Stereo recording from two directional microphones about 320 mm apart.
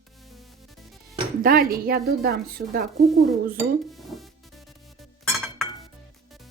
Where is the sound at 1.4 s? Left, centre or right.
Right.